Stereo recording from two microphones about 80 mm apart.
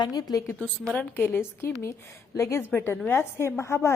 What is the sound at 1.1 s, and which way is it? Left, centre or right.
A woman's voice, left.